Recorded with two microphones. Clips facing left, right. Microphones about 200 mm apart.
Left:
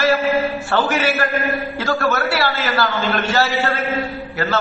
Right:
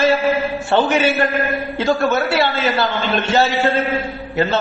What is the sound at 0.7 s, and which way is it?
A man's voice, 20° right (ahead or behind).